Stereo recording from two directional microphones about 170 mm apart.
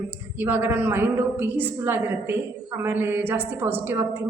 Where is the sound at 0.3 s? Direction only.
10° right (ahead or behind).